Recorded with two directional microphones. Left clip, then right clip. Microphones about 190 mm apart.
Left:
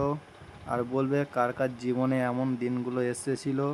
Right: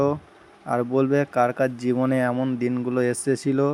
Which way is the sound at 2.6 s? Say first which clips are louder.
Right 9 dB; 20° right (ahead or behind).